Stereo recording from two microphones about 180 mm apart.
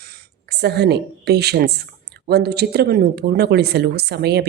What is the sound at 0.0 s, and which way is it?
A woman's voice, 60° right (ahead or behind).